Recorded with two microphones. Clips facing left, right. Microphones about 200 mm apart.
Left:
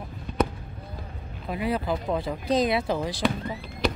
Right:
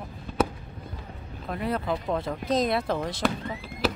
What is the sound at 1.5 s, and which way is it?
Speech, 5° left (ahead or behind).